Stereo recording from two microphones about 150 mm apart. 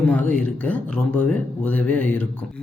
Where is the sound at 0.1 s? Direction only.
10° left (ahead or behind).